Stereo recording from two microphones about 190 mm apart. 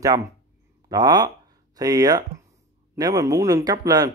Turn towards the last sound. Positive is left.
turn(degrees=-20)  # may be behind; listen again after turning